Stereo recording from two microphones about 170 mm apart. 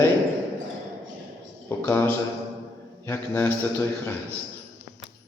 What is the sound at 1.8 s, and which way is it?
Speech, 10° left (ahead or behind).